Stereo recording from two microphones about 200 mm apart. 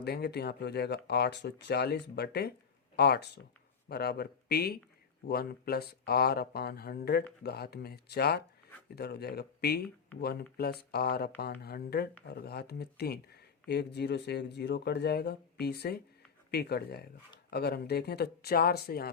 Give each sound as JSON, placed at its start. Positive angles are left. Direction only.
{"t": 0.0, "sound": "speech", "side_deg": 55}